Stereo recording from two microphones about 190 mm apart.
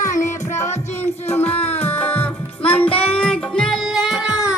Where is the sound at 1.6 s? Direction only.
30° left (ahead or behind).